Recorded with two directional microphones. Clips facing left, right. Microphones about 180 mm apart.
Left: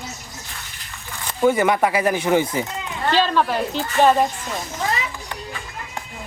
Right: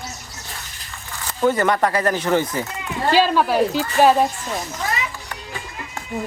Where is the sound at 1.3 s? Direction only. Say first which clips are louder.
Left 1 dB; 10° left (ahead or behind).